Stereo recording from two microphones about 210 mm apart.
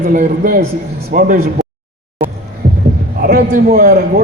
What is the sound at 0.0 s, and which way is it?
A man's voice, 40° right (ahead or behind).